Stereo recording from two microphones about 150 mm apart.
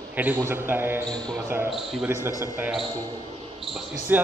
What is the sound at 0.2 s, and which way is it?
A man's voice, 15° right (ahead or behind).